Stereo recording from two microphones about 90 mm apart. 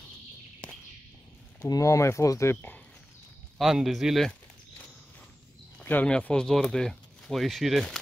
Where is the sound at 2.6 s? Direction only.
20° left (ahead or behind).